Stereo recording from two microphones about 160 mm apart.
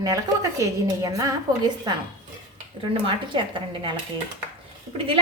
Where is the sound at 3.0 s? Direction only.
30° right (ahead or behind).